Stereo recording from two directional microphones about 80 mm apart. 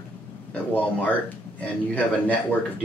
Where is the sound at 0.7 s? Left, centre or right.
Left.